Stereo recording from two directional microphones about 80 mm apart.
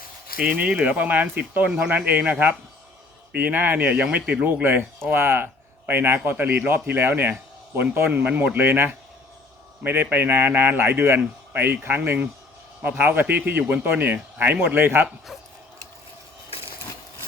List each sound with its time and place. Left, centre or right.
0.3 s speech: centre
3.3 s speech: right